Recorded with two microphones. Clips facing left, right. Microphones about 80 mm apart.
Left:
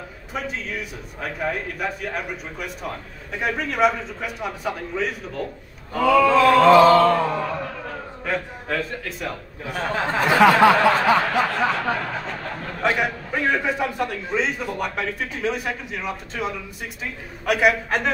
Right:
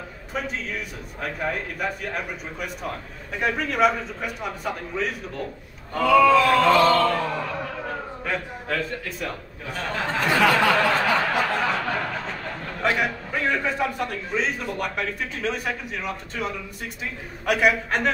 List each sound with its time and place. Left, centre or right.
0.3 s a man's voice: centre
9.8 s speech: centre
11.7 s a man's voice: centre